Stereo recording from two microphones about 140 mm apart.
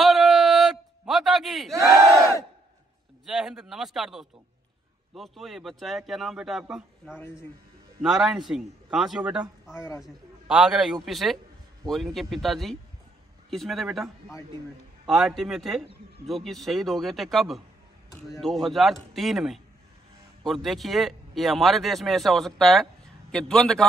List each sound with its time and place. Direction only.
0.0 s a sound: centre (ahead or behind)
2.0 s battle cry: 20° right (ahead or behind)
3.3 s speech: 5° right (ahead or behind)